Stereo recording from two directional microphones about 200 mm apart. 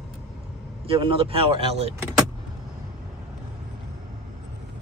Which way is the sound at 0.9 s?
25° right (ahead or behind).